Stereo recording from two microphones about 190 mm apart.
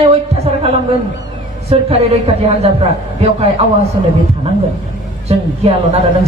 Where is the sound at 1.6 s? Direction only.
30° right (ahead or behind).